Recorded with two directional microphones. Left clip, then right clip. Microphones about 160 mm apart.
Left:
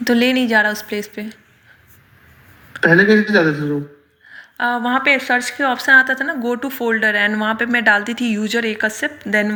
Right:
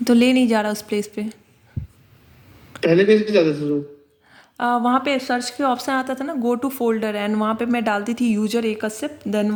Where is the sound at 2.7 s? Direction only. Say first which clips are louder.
Left 5 dB; 90° right.